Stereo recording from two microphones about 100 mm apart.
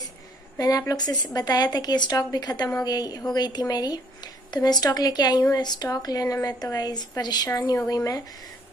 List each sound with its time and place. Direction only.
0.6 s a woman's voice: 35° left (ahead or behind)